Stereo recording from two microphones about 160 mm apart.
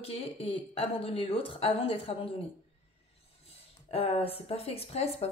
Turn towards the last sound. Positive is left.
turn(degrees=40)  # may be behind; listen again after turning